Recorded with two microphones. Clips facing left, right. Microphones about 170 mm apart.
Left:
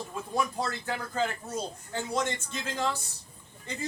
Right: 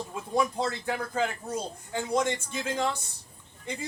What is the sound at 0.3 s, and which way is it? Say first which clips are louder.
A man's voice: right 4 dB; 20° right (ahead or behind).